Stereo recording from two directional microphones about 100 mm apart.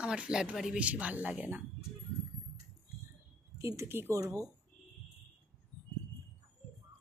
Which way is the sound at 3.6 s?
30° right (ahead or behind).